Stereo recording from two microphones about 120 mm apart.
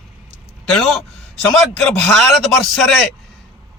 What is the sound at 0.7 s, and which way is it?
A man's voice, 5° left (ahead or behind).